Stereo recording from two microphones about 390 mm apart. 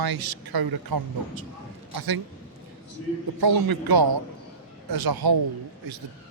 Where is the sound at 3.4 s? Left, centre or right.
Right.